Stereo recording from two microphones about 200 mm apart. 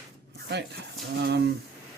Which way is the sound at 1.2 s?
60° right (ahead or behind).